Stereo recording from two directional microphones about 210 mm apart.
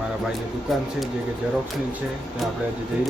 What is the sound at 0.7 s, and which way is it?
Speech, centre (ahead or behind).